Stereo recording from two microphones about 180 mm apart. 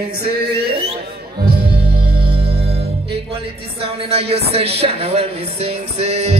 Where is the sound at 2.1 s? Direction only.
30° right (ahead or behind).